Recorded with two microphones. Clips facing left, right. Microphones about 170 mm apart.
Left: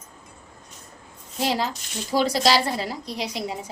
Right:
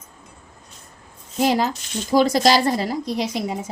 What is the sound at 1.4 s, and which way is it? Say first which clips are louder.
A woman's voice: right 6 dB; 50° right (ahead or behind).